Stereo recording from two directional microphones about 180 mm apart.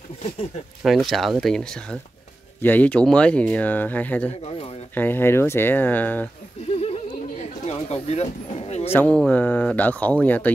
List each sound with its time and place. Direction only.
0.8 s speech: centre (ahead or behind)
6.8 s vehicle: 35° left (ahead or behind)
8.9 s speech: 5° left (ahead or behind)